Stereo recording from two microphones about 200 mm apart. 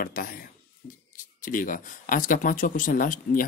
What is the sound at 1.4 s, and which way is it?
Speech, 40° left (ahead or behind).